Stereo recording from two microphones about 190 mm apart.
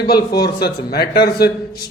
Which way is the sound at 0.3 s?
55° left (ahead or behind).